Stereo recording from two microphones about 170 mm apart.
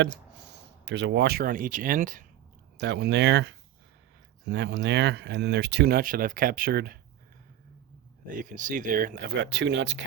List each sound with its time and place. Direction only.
0.0 s speech: 80° right; by 2.2 s 50° right (ahead or behind)
2.8 s speech: 85° right; by 7.0 s 65° right (ahead or behind)
8.3 s speech: 50° right (ahead or behind); by 10.0 s 90° right